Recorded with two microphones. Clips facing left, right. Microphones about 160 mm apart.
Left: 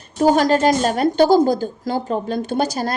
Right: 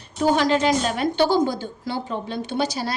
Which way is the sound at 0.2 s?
40° left (ahead or behind).